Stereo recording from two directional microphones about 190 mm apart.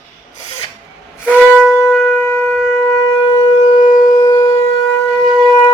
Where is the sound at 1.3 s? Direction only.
5° right (ahead or behind).